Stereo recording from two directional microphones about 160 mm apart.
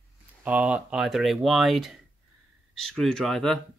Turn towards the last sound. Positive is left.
turn(degrees=0)  # may be behind; listen again after turning